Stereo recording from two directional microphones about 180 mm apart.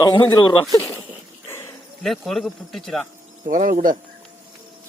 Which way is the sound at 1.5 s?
15° left (ahead or behind).